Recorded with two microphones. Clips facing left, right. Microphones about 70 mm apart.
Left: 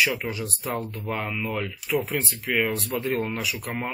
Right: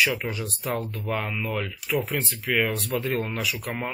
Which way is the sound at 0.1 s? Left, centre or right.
Centre.